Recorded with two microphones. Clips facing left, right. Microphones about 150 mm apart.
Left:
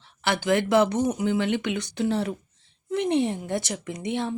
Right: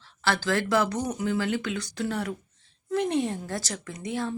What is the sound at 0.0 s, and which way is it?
Speech, 20° left (ahead or behind).